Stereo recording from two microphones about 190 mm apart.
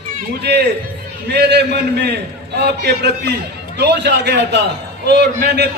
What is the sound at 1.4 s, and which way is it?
A man's voice, 60° right (ahead or behind).